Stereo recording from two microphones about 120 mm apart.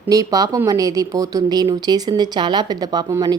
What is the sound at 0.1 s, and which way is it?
Speech, 30° right (ahead or behind).